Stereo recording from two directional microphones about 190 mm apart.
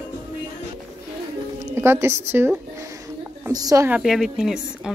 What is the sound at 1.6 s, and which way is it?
Music, 15° right (ahead or behind).